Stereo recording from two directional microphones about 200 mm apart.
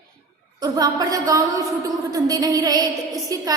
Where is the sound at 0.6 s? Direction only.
20° right (ahead or behind).